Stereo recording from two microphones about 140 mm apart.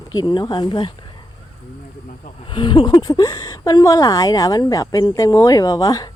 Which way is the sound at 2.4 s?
35° left (ahead or behind).